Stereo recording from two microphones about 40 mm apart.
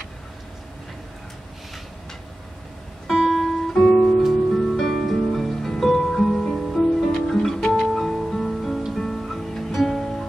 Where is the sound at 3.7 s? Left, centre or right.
Centre.